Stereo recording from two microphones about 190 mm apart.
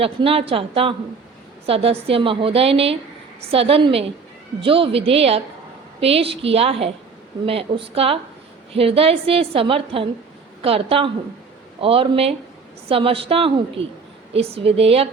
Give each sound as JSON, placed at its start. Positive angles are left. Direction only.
{"t": 0.0, "sound": "a woman's voice", "side_deg": -30}